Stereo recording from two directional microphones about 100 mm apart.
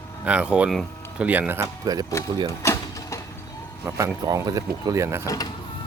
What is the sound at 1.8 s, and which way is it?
Speech, 40° right (ahead or behind).